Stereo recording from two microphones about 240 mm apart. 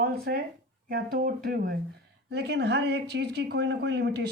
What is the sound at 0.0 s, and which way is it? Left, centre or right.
Speech, right.